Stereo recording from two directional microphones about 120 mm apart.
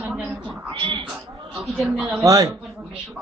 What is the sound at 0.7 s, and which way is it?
Speech, 45° right (ahead or behind).